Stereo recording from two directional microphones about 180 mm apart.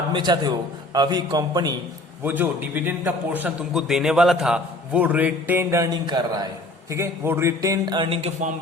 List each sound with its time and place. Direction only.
0.1 s a man's voice: 25° right (ahead or behind)
2.2 s a man's voice: 10° right (ahead or behind); by 8.4 s 35° right (ahead or behind)